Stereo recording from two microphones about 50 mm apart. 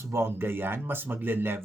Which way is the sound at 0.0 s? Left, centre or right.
Right.